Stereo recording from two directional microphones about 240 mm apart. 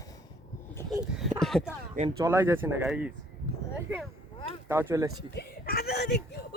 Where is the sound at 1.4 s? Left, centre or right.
Centre.